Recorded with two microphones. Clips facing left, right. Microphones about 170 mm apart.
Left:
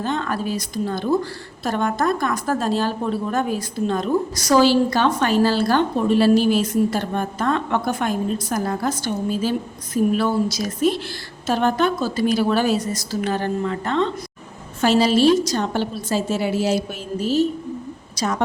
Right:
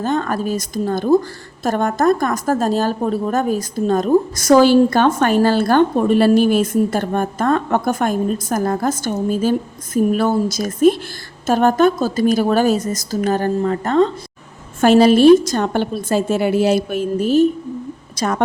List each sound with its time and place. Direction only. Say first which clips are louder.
0.0 s a woman's voice: right 4 dB; 45° right (ahead or behind)
14.8 s a woman's voice: right 6 dB; 55° right (ahead or behind)